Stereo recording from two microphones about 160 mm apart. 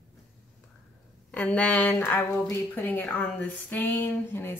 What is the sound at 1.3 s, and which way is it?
Speech, 5° left (ahead or behind).